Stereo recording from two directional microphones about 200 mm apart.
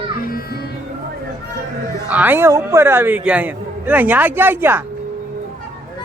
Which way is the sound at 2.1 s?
10° right (ahead or behind).